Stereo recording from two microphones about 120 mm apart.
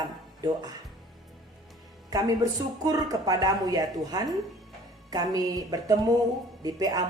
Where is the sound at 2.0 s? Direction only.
30° right (ahead or behind).